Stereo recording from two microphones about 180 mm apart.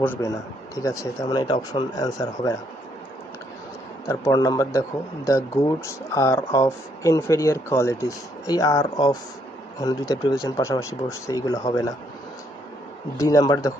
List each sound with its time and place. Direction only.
0.0 s speech: 15° left (ahead or behind)
4.0 s speech: 15° left (ahead or behind)
13.1 s speech: 20° left (ahead or behind)